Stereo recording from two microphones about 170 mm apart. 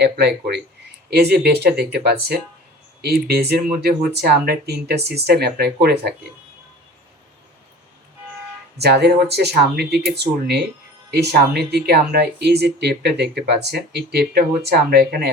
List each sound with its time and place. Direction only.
0.0 s speech: 75° right (ahead or behind)
8.8 s speech: 75° right (ahead or behind)